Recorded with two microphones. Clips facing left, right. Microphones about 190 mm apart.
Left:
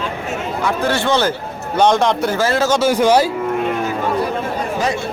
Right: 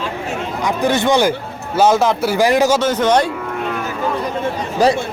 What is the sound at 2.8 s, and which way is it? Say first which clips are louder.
Speech: left 2 dB; 10° left (ahead or behind).